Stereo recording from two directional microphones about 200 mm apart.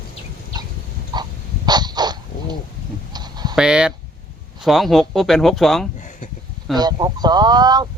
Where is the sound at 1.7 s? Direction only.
20° right (ahead or behind).